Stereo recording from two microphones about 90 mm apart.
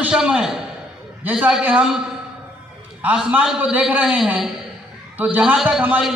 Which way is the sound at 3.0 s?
15° right (ahead or behind).